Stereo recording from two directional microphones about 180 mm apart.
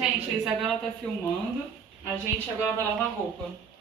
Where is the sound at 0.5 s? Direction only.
Centre (ahead or behind).